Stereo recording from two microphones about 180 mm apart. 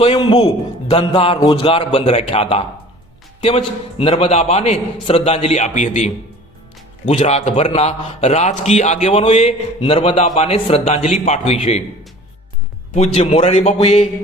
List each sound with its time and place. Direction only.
0.0 s a man's voice: 30° left (ahead or behind)
7.1 s a man's voice: 35° left (ahead or behind)
12.9 s a man's voice: 35° left (ahead or behind)